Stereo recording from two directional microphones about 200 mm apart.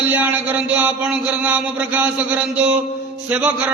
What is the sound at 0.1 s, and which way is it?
A man's voice, 10° right (ahead or behind).